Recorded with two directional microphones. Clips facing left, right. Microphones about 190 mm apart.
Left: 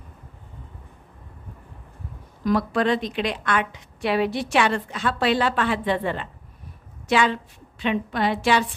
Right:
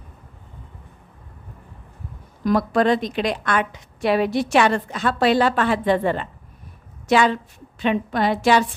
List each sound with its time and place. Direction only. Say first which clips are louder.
2.4 s a woman's voice: right 3 dB; 45° right (ahead or behind)